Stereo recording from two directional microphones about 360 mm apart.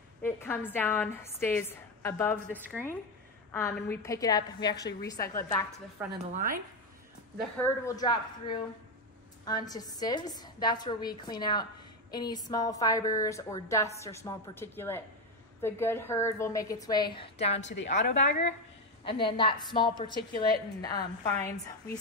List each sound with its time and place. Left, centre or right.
0.2 s a woman's voice: centre
6.0 s a woman's voice: centre
6.3 s speech: right
7.3 s a woman's voice: centre